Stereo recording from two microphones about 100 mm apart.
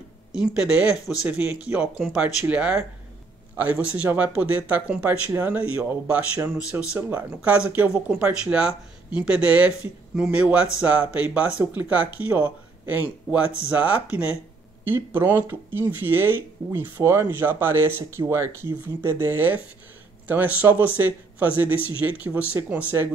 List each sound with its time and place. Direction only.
0.3 s speech: 10° right (ahead or behind)
13.3 s speech: 5° right (ahead or behind)